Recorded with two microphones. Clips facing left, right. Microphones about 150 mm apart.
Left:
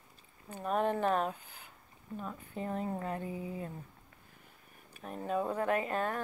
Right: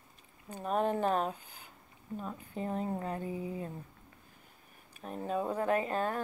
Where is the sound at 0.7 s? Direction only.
35° right (ahead or behind).